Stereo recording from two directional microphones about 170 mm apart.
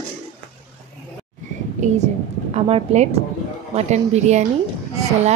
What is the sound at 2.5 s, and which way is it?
A woman's voice, 40° right (ahead or behind).